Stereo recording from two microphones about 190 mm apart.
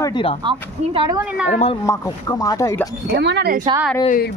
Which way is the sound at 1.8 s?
15° left (ahead or behind).